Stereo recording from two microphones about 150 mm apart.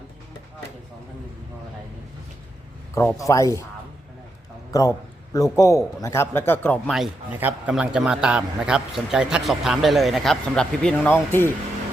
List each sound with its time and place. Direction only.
3.2 s a man's voice: 20° left (ahead or behind)
4.7 s a man's voice: 25° left (ahead or behind)
7.3 s a man's voice: 10° right (ahead or behind); by 11.5 s 15° left (ahead or behind)